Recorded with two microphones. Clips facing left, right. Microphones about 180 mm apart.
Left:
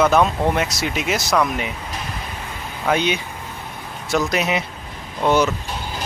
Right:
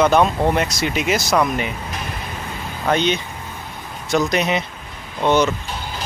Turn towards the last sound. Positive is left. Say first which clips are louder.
# right 1 dB
turn(degrees=5)  # may be behind; listen again after turning